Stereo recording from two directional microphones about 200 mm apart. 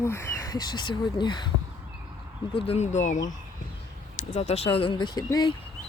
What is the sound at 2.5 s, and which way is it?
Speech, 30° left (ahead or behind).